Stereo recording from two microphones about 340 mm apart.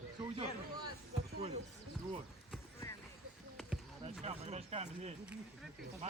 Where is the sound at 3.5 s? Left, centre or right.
Centre.